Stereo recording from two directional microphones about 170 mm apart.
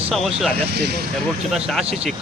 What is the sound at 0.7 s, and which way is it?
Speech, 75° right (ahead or behind).